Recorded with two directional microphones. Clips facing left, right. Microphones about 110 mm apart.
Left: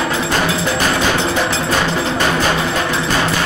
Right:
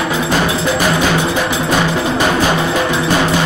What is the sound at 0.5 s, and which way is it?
Percussion, 15° right (ahead or behind).